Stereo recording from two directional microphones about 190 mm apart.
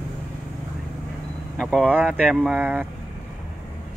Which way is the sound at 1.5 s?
5° left (ahead or behind).